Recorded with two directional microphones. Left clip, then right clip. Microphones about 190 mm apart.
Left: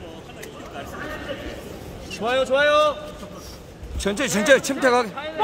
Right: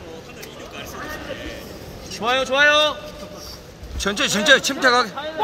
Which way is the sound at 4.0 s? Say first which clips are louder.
Right 3 dB; 15° left (ahead or behind).